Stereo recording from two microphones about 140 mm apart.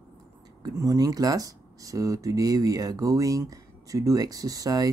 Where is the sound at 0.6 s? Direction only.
25° right (ahead or behind).